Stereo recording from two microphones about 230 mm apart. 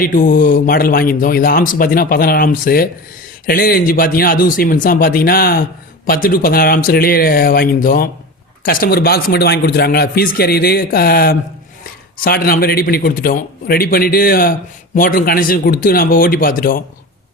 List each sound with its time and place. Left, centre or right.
0.0 s speech: left